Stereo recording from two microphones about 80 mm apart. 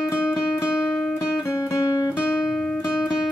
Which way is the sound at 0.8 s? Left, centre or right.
Centre.